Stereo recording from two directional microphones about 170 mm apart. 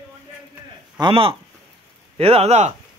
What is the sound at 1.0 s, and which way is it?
Speech, 30° right (ahead or behind).